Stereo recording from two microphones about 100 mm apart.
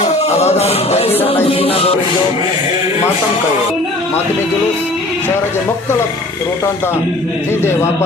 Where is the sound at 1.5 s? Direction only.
75° left (ahead or behind).